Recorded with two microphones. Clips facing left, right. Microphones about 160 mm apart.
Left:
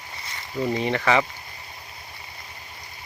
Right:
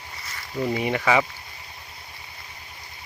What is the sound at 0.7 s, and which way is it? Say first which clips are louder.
Speech: even; 10° right (ahead or behind).